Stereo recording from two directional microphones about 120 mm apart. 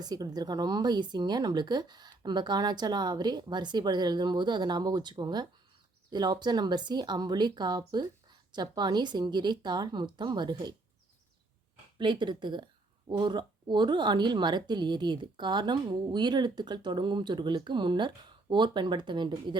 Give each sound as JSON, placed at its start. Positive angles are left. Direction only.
{"t": 0.0, "sound": "speech", "side_deg": -35}
{"t": 11.9, "sound": "speech", "side_deg": -40}